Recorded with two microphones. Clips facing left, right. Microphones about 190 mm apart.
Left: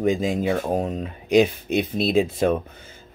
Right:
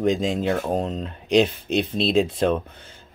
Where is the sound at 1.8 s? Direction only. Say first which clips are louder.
Even; 50° left (ahead or behind).